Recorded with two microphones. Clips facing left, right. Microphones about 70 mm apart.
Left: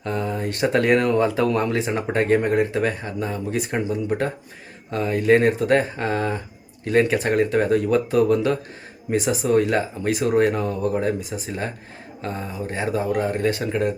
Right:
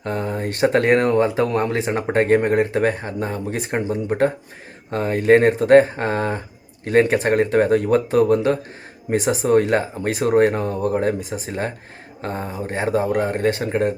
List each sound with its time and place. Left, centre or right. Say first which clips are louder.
0.0 s speech: right 1 dB; right